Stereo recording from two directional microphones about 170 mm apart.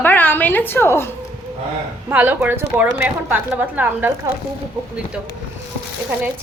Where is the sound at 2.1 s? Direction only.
10° right (ahead or behind).